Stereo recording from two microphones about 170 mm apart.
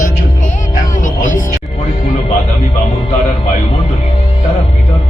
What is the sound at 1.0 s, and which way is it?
Speech, 50° left (ahead or behind).